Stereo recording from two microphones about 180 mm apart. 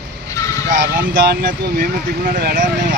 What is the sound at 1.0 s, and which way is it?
Speech, 55° right (ahead or behind).